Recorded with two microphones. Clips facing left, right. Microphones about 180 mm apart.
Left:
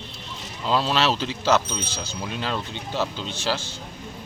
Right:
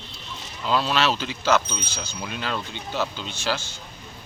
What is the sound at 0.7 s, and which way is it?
Speech, 30° left (ahead or behind).